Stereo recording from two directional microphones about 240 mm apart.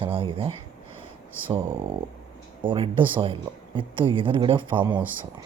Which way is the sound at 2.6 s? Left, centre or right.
Right.